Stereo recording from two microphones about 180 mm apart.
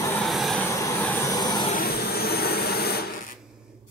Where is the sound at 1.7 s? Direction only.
55° left (ahead or behind).